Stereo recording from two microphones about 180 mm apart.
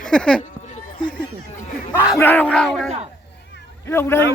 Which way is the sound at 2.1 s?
10° left (ahead or behind).